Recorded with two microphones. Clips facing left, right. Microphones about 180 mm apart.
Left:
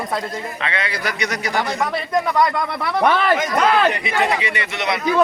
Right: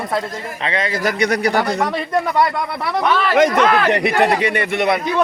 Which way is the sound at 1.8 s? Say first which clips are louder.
Right 1 dB; 5° right (ahead or behind).